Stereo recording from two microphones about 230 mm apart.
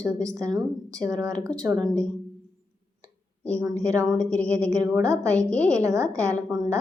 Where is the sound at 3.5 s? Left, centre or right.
Centre.